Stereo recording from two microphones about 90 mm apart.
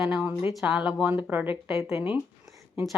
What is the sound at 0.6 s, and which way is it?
Speech, 10° right (ahead or behind).